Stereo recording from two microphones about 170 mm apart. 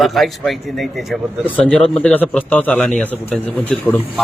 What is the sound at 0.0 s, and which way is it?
Speech, centre (ahead or behind).